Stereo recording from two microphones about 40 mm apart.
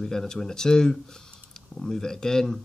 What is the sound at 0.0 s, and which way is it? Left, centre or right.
Speech, centre.